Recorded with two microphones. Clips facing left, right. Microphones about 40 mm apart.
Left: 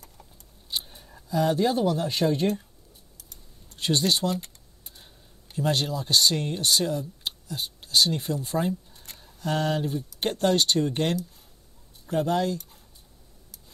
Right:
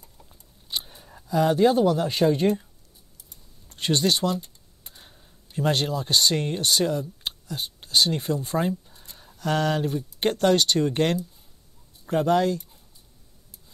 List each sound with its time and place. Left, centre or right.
1.3 s speech: right
3.7 s speech: right